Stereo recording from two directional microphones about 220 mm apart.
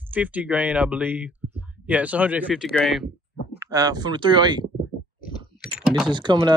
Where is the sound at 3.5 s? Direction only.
15° right (ahead or behind).